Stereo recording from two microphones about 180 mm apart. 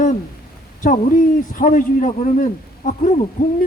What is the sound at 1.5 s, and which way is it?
A man's voice, 50° left (ahead or behind).